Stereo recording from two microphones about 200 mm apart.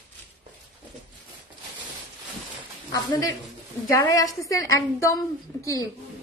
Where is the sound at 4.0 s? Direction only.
15° left (ahead or behind).